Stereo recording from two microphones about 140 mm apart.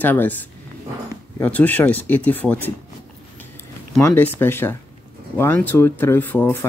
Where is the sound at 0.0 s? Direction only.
10° left (ahead or behind).